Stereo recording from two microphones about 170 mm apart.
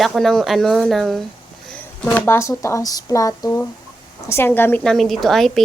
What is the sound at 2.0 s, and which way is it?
A woman's voice, 10° left (ahead or behind).